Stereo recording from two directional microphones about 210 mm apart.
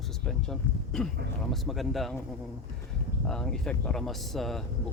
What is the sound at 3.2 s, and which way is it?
Speech, centre (ahead or behind).